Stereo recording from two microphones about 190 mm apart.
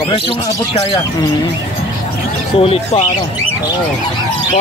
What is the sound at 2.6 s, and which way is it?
Speech, 30° left (ahead or behind).